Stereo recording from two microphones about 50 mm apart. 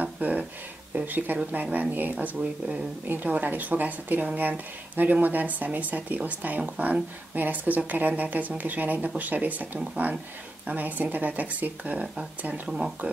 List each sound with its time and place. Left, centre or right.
0.0 s a sound: right
0.9 s speech: right
2.1 s speech: right
12.6 s speech: centre